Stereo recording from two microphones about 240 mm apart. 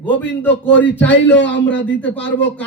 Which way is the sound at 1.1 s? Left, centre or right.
Left.